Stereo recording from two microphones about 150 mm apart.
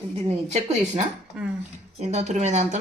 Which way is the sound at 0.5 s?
50° right (ahead or behind).